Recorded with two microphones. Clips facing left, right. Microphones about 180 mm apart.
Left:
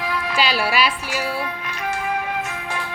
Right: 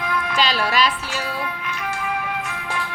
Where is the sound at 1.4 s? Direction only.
35° left (ahead or behind).